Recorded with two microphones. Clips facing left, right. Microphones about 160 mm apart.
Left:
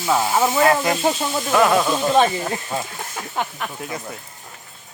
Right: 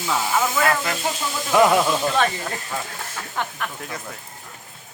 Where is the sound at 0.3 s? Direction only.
30° left (ahead or behind).